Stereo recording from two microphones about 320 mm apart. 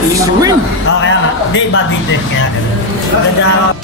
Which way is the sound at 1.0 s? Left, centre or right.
Left.